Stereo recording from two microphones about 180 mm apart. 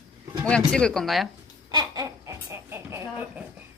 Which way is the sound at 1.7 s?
20° right (ahead or behind).